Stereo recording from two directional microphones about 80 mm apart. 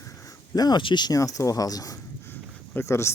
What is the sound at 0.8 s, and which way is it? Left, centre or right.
Speech, left.